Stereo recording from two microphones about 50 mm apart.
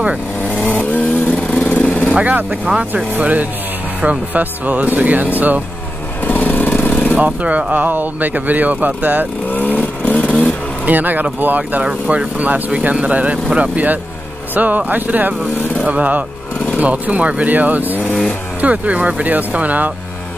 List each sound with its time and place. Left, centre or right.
0.5 s vehicle: left
2.1 s speech: right
6.2 s lawn mower: left
7.2 s speech: right
9.5 s vehicle: left
10.9 s speech: right
18.0 s speech: centre
18.6 s speech: right